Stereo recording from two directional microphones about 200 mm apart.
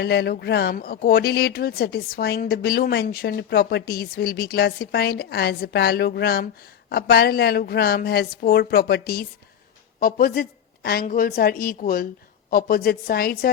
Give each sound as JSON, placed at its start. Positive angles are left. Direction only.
{"t": 0.0, "sound": "speech", "side_deg": 55}